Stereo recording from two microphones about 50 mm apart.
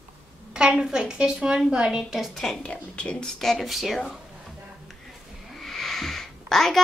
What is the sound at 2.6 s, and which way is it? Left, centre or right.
Speech, left.